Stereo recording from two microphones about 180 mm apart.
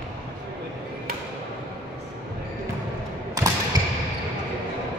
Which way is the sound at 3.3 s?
20° right (ahead or behind).